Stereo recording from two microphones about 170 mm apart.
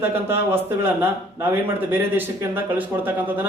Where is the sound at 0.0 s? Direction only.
15° right (ahead or behind).